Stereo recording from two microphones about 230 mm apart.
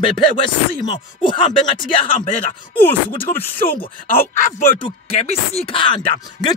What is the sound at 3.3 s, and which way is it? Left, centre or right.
Speech, left.